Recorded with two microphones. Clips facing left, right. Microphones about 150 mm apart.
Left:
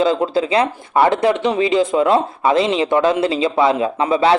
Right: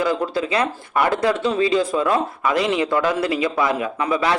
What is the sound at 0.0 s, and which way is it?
Speech, 25° left (ahead or behind).